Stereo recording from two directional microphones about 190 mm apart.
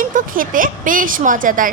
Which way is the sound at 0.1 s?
45° right (ahead or behind).